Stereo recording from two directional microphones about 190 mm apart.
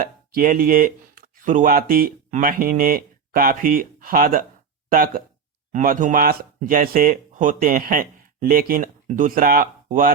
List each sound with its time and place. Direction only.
0.0 s speech: 50° right (ahead or behind)